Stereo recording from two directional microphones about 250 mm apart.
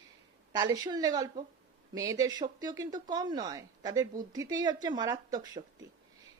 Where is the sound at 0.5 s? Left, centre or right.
Centre.